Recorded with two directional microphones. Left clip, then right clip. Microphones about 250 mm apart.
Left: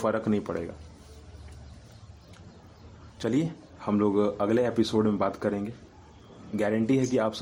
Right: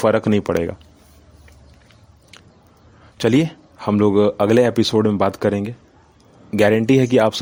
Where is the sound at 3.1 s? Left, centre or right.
Right.